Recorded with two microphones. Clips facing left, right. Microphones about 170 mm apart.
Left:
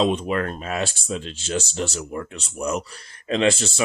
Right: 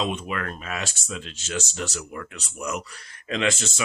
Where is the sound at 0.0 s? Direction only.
35° left (ahead or behind).